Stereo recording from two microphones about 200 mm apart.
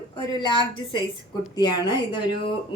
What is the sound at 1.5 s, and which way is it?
Speech, 20° left (ahead or behind).